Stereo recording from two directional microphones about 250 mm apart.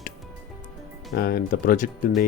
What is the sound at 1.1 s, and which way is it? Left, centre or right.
Speech, left.